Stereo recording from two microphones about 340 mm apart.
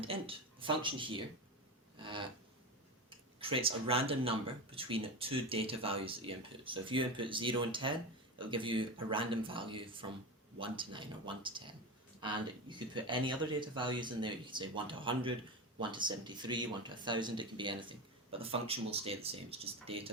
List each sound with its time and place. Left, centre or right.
0.0 s speech: centre
2.0 s a sound: centre
3.5 s speech: centre